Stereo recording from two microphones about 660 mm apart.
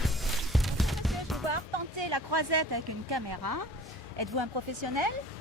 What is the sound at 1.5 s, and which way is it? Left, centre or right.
Music, right.